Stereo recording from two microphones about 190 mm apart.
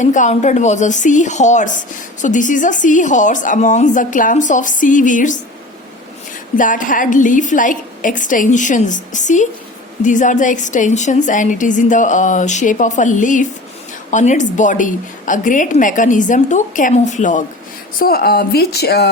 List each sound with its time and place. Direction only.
0.0 s a woman's voice: 40° left (ahead or behind)
6.6 s a woman's voice: 45° left (ahead or behind)
18.0 s a woman's voice: 50° left (ahead or behind)